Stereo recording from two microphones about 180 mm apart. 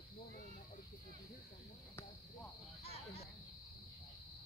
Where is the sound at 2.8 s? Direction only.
35° left (ahead or behind).